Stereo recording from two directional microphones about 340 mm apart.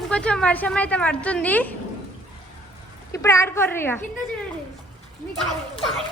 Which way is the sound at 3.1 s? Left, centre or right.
Centre.